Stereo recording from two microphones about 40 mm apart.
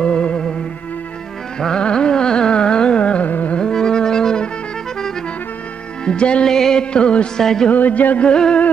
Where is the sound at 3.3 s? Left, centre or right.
Left.